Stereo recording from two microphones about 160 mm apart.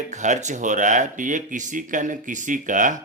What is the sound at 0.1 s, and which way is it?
A man's voice, 50° right (ahead or behind).